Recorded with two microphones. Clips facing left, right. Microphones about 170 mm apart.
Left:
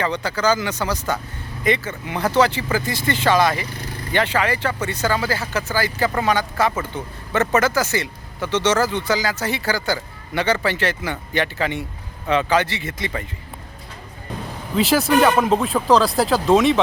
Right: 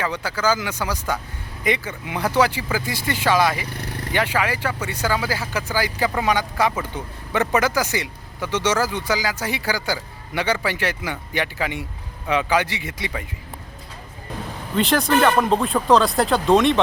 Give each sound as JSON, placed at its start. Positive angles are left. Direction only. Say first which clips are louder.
{"t": 0.0, "sound": "speech", "louder": "left 2 dB", "side_deg": -5}
{"t": 3.8, "sound": "vehicle", "louder": "right 1 dB", "side_deg": -65}
{"t": 4.1, "sound": "speech", "louder": "left 2 dB", "side_deg": -10}
{"t": 14.8, "sound": "speech", "louder": "left 2 dB", "side_deg": 5}